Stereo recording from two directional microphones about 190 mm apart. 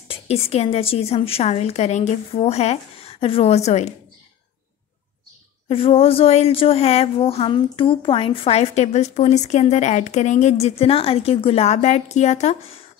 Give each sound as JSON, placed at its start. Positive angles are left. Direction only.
{"t": 0.1, "sound": "a woman's voice", "side_deg": 30}
{"t": 5.7, "sound": "a woman's voice", "side_deg": 30}